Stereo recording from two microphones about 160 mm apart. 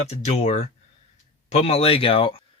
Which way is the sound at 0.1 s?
45° left (ahead or behind).